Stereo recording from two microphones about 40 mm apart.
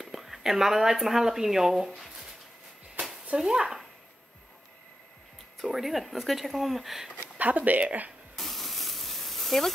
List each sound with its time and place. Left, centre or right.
0.0 s speech: centre
3.3 s speech: centre
5.6 s speech: centre
7.3 s speech: right
8.4 s a sound: centre